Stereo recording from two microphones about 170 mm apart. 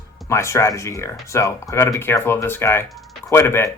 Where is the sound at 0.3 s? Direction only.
15° left (ahead or behind).